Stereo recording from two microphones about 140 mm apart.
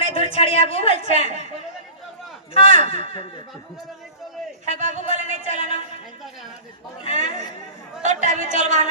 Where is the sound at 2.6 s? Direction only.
60° right (ahead or behind).